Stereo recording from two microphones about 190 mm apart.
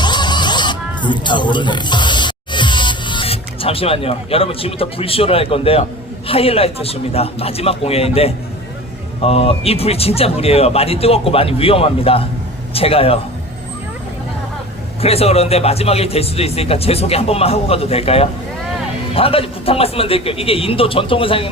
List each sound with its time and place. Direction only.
0.0 s a sound: 25° left (ahead or behind)
6.2 s speech: 30° left (ahead or behind)
15.0 s a man's voice: 30° left (ahead or behind)